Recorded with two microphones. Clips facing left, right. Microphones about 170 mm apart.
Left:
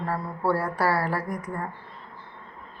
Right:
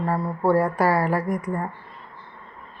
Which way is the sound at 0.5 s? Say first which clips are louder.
Right 5 dB; 15° right (ahead or behind).